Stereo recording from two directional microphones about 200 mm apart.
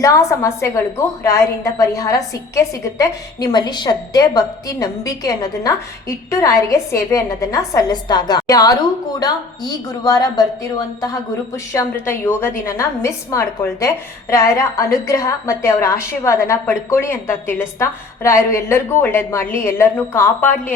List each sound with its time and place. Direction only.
0.0 s a woman's voice: 15° left (ahead or behind)